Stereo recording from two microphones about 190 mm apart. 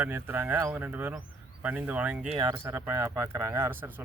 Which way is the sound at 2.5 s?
15° right (ahead or behind).